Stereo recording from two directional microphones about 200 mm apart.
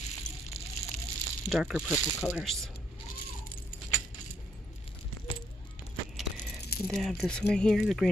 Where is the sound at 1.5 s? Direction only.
Centre (ahead or behind).